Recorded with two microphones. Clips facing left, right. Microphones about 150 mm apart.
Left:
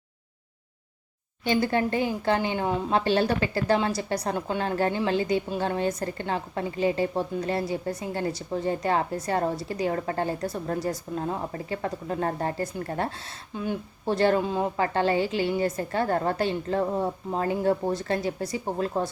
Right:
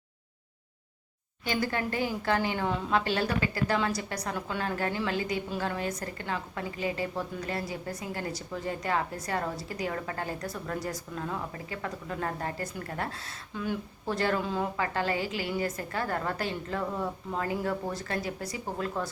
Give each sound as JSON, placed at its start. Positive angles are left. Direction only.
{"t": 1.5, "sound": "a woman's voice", "side_deg": 25}